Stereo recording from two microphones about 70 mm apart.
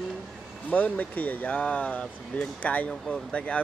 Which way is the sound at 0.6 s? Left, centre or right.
Left.